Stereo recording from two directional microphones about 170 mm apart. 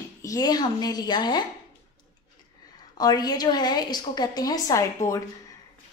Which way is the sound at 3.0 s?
25° left (ahead or behind).